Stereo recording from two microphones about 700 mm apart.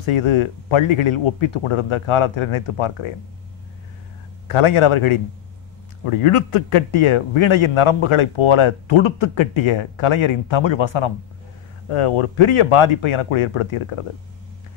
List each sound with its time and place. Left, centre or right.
0.0 s a man's voice: left
4.5 s a man's voice: left